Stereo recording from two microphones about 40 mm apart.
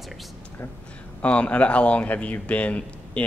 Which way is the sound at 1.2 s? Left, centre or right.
Left.